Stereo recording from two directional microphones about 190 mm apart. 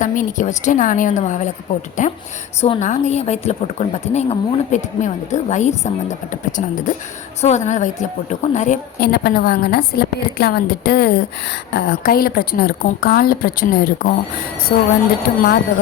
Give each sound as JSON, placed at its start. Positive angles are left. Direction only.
{"t": 0.0, "sound": "a woman's voice", "side_deg": 40}
{"t": 9.0, "sound": "a woman's voice", "side_deg": 55}